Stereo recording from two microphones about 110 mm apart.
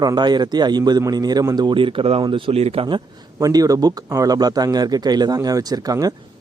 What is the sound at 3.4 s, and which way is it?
Speech, 35° right (ahead or behind).